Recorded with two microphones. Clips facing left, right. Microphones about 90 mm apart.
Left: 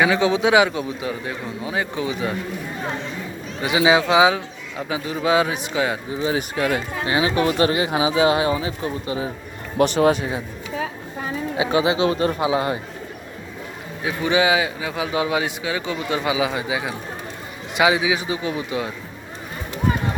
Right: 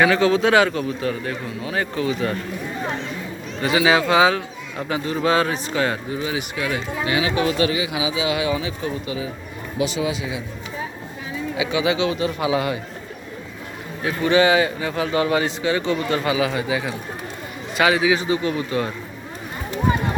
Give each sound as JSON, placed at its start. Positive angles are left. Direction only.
{"t": 0.0, "sound": "a man's voice", "side_deg": 10}
{"t": 3.6, "sound": "a man's voice", "side_deg": 15}
{"t": 6.1, "sound": "speech", "side_deg": 35}
{"t": 9.7, "sound": "a man's voice", "side_deg": 55}
{"t": 11.5, "sound": "speech", "side_deg": 35}
{"t": 12.4, "sound": "a man's voice", "side_deg": 30}
{"t": 14.0, "sound": "a man's voice", "side_deg": 15}